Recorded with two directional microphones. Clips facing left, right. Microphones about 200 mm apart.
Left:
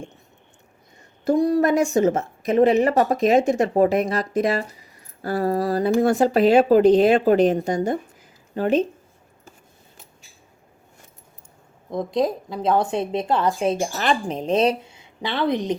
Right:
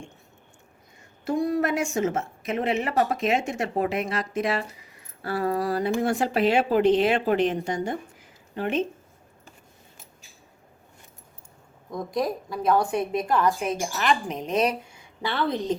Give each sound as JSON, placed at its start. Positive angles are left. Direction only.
{"t": 1.2, "sound": "a woman's voice", "side_deg": 40}
{"t": 11.9, "sound": "a woman's voice", "side_deg": 25}